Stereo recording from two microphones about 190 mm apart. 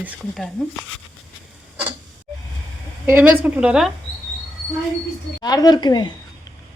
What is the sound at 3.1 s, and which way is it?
Speech, 10° right (ahead or behind).